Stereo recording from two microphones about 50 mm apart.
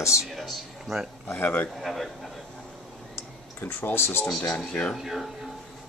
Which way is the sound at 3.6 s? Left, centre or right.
Left.